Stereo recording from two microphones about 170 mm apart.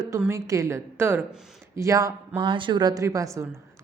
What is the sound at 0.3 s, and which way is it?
A woman's voice, 20° right (ahead or behind).